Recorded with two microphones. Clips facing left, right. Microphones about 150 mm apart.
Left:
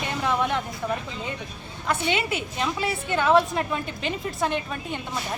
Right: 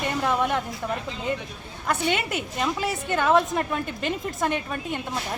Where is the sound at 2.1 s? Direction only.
50° right (ahead or behind).